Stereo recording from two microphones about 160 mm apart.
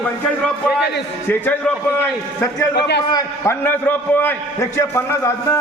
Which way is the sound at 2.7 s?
90° left.